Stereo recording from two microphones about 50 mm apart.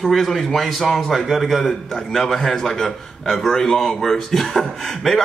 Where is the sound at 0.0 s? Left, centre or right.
Centre.